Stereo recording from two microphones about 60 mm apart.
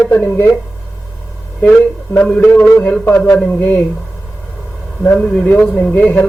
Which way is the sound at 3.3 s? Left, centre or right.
Centre.